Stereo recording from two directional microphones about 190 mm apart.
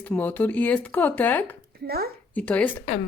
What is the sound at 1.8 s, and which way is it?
Speech, 55° right (ahead or behind).